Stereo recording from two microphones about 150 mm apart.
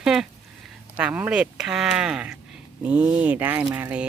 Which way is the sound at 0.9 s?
10° right (ahead or behind).